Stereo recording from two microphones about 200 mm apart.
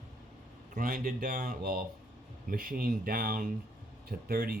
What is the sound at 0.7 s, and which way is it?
Speech, 45° right (ahead or behind).